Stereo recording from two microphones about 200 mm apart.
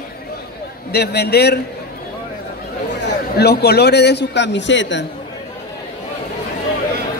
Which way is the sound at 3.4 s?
55° left (ahead or behind).